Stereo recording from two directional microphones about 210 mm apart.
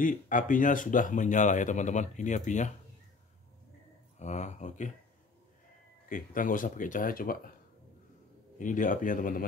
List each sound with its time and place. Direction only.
0.0 s speech: 40° left (ahead or behind)
4.2 s speech: 35° left (ahead or behind)
6.0 s speech: 40° left (ahead or behind)
8.5 s speech: 40° left (ahead or behind)